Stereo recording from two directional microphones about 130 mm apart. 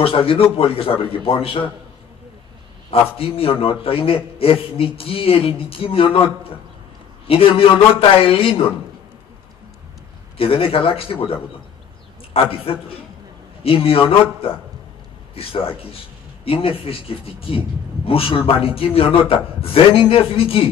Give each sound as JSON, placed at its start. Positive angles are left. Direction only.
{"t": 0.0, "sound": "a man's voice", "side_deg": 45}
{"t": 2.9, "sound": "a man's voice", "side_deg": 45}
{"t": 10.3, "sound": "a man's voice", "side_deg": 45}
{"t": 12.4, "sound": "a man's voice", "side_deg": 45}
{"t": 15.3, "sound": "a man's voice", "side_deg": 45}